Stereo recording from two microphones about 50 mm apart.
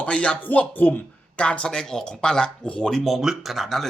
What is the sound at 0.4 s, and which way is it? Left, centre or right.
Speech, left.